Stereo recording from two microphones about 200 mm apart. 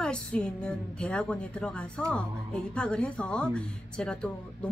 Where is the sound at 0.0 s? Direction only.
5° left (ahead or behind).